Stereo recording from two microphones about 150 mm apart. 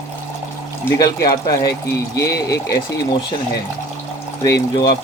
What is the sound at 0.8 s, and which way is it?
Speech, 25° left (ahead or behind).